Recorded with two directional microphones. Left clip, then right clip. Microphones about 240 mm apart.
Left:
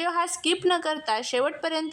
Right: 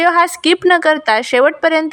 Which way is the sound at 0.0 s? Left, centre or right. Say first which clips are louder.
Right 14 dB; centre.